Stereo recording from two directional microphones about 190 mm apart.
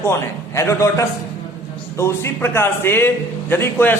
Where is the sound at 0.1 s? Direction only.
15° left (ahead or behind).